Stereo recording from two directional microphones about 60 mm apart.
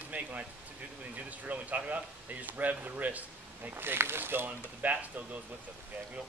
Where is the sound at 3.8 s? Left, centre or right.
Right.